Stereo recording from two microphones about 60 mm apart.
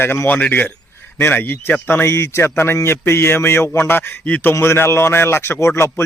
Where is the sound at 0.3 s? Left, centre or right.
Left.